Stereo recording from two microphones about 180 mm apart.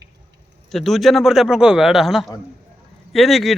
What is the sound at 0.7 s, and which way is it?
Speech, centre (ahead or behind).